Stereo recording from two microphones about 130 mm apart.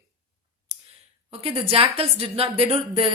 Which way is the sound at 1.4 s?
45° right (ahead or behind).